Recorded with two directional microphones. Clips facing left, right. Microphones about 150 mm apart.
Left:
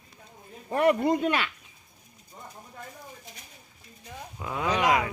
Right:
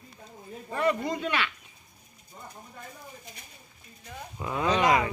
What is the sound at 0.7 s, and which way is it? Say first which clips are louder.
Speech: left 5 dB; 60° left (ahead or behind).